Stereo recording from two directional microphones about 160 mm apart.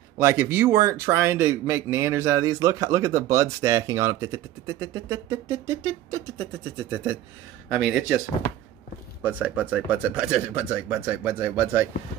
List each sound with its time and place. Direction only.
0.2 s speech: 15° right (ahead or behind)
7.7 s a man's voice: 5° right (ahead or behind)
9.2 s speech: 10° right (ahead or behind)